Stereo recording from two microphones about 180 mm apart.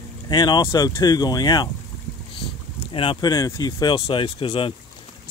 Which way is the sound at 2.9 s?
30° left (ahead or behind).